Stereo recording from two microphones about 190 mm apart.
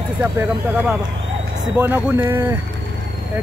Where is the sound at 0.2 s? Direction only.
10° right (ahead or behind).